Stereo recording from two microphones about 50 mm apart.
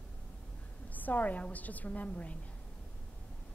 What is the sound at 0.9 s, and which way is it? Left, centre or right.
A woman's voice, left.